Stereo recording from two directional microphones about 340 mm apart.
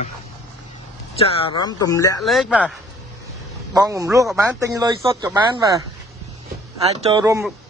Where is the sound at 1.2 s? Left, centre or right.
Centre.